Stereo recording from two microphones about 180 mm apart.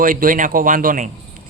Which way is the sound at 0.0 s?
50° right (ahead or behind).